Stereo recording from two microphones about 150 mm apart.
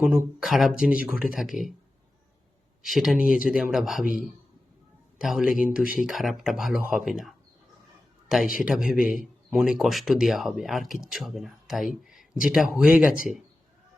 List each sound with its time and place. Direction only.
0.0 s speech: 10° right (ahead or behind)
2.8 s speech: centre (ahead or behind)
5.1 s a man's voice: 5° right (ahead or behind)
5.5 s speech: 65° left (ahead or behind)
5.9 s speech: 5° right (ahead or behind)
8.6 s speech: 5° right (ahead or behind)
12.0 s a sound: 5° right (ahead or behind)
12.7 s speech: 5° right (ahead or behind)